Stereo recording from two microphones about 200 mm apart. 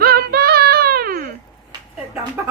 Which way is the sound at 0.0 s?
50° right (ahead or behind).